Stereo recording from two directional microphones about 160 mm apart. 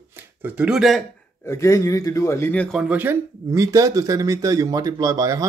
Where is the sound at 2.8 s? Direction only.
10° right (ahead or behind).